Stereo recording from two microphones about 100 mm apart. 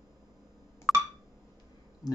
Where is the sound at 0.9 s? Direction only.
Centre (ahead or behind).